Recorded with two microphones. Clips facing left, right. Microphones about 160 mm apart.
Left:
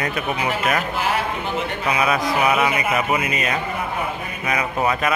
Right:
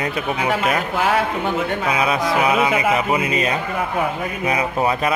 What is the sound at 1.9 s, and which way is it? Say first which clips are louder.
Speech: even; 25° right (ahead or behind).